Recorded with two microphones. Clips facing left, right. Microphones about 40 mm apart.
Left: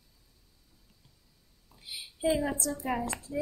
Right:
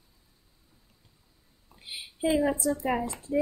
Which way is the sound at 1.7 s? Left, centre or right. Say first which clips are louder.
Right 2 dB; right.